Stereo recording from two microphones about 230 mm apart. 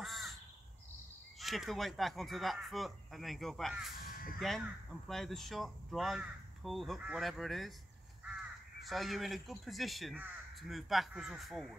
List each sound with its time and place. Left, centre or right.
0.0 s crow: centre
1.4 s speech: centre
4.0 s caw: left
4.4 s speech: centre
8.8 s speech: centre